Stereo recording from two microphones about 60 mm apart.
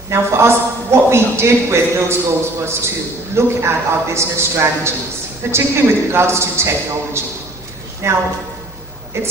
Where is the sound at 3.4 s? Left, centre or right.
Right.